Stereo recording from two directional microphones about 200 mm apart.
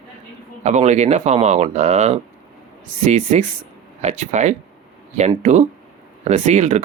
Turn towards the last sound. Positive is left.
turn(degrees=-35)  # may be behind; listen again after turning